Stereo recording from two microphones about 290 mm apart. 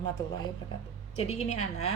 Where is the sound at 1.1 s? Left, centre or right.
Left.